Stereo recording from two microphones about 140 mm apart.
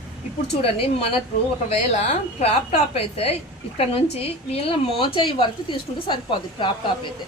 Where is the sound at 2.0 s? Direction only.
55° left (ahead or behind); by 6.1 s 35° left (ahead or behind).